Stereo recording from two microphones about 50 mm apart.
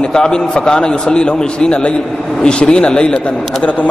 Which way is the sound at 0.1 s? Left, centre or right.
Centre.